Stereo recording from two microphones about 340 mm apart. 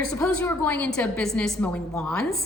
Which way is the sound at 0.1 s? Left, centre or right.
Centre.